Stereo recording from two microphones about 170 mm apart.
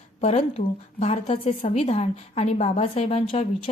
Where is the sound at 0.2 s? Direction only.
40° left (ahead or behind).